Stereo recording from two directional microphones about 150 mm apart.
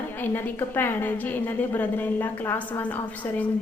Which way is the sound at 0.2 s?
15° left (ahead or behind).